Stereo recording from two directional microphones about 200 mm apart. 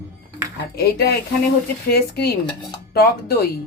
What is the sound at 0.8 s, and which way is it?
A woman's voice, 55° left (ahead or behind).